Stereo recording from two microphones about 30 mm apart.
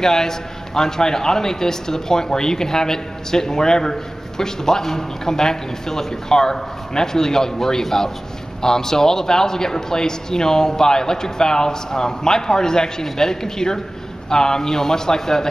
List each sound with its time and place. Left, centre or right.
0.0 s a man's voice: centre